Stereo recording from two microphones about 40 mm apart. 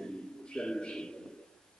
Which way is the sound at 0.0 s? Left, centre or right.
Left.